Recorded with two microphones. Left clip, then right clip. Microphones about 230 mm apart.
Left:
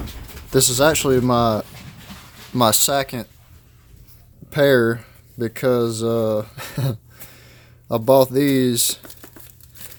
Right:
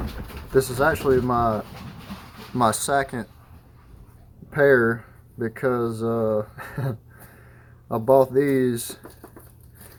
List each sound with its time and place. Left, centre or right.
0.5 s speech: left
4.5 s speech: left